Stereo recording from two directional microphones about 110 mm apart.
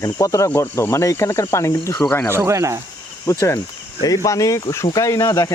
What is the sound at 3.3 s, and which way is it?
Speech, 30° left (ahead or behind).